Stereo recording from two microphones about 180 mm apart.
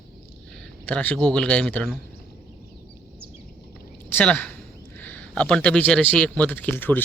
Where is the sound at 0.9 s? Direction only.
5° left (ahead or behind).